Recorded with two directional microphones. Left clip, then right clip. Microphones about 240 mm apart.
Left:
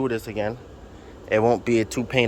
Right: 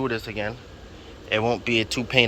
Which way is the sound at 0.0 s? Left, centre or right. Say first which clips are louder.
Left 2 dB; centre.